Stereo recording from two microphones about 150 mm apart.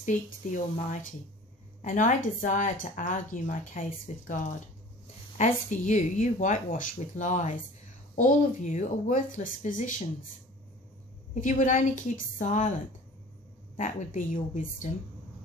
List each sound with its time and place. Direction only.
0.0 s speech: 55° left (ahead or behind)
4.1 s speech: 50° left (ahead or behind)
5.4 s speech: 55° left (ahead or behind)
11.4 s speech: 60° left (ahead or behind)
13.7 s speech: 50° left (ahead or behind)